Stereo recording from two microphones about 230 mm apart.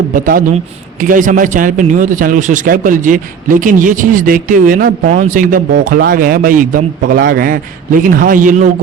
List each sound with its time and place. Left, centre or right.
0.1 s speech: right